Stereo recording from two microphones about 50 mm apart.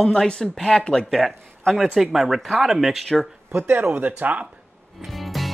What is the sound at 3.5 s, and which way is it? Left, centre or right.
Speech, right.